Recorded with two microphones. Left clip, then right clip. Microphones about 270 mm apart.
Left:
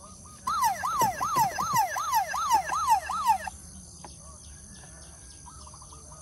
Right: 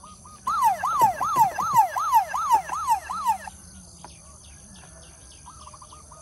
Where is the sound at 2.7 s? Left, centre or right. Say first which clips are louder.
Even; centre.